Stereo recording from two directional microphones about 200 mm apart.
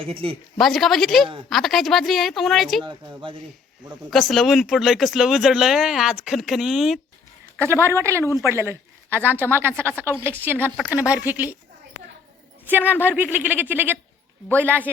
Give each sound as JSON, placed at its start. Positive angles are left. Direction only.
{"t": 0.0, "sound": "speech", "side_deg": -25}
{"t": 0.6, "sound": "speech", "side_deg": 0}
{"t": 2.8, "sound": "speech", "side_deg": -25}
{"t": 4.1, "sound": "speech", "side_deg": 0}
{"t": 7.6, "sound": "speech", "side_deg": -10}
{"t": 12.6, "sound": "a woman's voice", "side_deg": -10}